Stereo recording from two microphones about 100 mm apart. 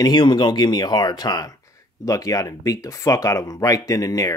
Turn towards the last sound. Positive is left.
turn(degrees=35)  # may be behind; listen again after turning